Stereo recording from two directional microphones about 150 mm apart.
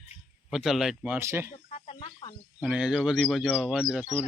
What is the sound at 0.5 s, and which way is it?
Speech, centre (ahead or behind).